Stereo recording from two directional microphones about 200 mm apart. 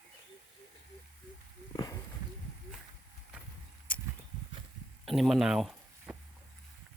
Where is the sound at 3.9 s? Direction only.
10° left (ahead or behind).